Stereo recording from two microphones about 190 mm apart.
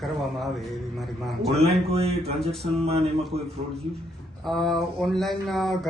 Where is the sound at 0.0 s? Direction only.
Centre (ahead or behind).